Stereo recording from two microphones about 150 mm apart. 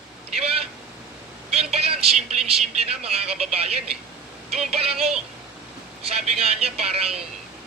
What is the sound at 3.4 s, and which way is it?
Vehicle, 45° right (ahead or behind).